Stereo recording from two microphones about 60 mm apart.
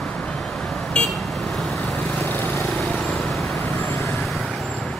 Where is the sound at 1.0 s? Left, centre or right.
Centre.